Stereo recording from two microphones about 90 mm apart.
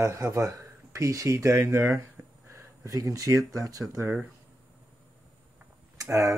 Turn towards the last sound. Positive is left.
turn(degrees=-35)  # may be behind; listen again after turning